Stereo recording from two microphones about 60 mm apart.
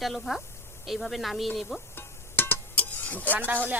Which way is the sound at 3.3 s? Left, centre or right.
Right.